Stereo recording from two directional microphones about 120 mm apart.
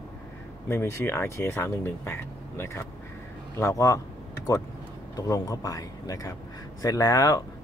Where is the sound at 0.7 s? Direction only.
20° left (ahead or behind).